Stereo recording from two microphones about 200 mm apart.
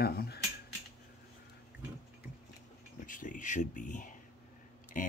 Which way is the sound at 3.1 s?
40° left (ahead or behind).